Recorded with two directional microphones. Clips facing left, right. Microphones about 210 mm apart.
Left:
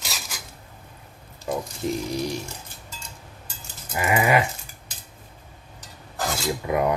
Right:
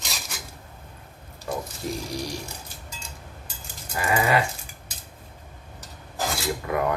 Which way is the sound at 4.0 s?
20° left (ahead or behind).